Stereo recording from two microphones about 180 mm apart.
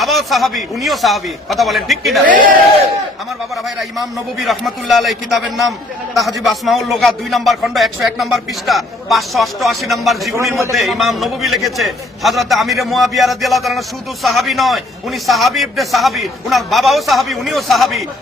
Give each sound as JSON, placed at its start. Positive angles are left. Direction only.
{"t": 0.0, "sound": "a man's voice", "side_deg": 0}
{"t": 2.2, "sound": "a man's voice", "side_deg": -50}
{"t": 3.8, "sound": "a man's voice", "side_deg": 0}
{"t": 6.1, "sound": "a man's voice", "side_deg": 0}